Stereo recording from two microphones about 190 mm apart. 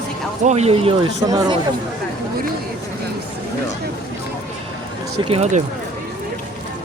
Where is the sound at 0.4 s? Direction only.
35° right (ahead or behind).